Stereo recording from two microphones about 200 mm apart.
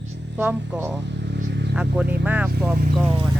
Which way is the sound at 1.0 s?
60° right (ahead or behind).